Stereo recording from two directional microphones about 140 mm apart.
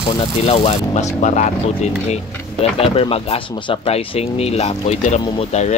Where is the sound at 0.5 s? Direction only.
50° left (ahead or behind).